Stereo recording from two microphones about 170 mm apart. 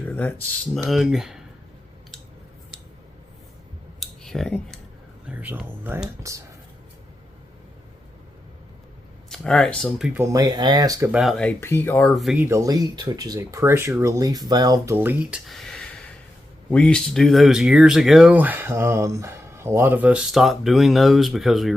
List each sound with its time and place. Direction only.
0.0 s speech: 10° left (ahead or behind)
4.0 s a sound: centre (ahead or behind)
5.2 s speech: 10° right (ahead or behind)
9.3 s speech: 5° left (ahead or behind)
10.2 s speech: 20° right (ahead or behind)
11.1 s speech: centre (ahead or behind)
12.4 s speech: 15° right (ahead or behind)
14.9 s speech: 10° right (ahead or behind)